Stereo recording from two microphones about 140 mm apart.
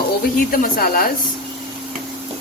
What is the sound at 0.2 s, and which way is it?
Speech, 90° left.